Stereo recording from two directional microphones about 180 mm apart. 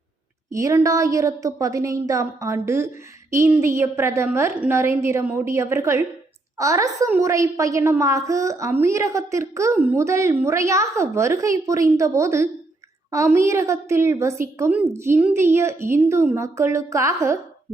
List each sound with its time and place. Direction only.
0.5 s a woman's voice: 15° right (ahead or behind)